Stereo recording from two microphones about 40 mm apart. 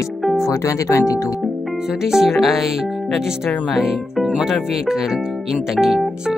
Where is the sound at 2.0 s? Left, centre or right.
Centre.